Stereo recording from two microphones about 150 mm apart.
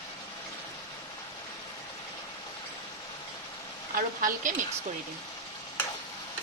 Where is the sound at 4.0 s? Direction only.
65° right (ahead or behind).